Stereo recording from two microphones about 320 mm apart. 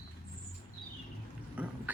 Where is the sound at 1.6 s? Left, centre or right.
Centre.